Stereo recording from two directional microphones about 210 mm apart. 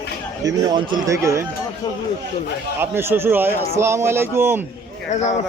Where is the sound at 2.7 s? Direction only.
10° right (ahead or behind).